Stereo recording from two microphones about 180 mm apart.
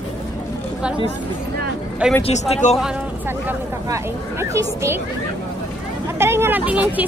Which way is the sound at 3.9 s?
15° right (ahead or behind).